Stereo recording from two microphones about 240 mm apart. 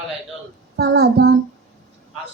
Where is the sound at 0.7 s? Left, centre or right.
Right.